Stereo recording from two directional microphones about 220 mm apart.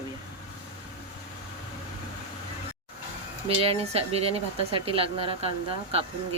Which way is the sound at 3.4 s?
25° right (ahead or behind).